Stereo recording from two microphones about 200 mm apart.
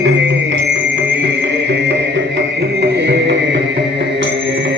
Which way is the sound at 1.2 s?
60° right (ahead or behind).